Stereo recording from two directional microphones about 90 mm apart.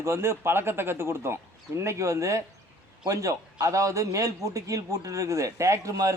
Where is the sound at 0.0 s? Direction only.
30° right (ahead or behind).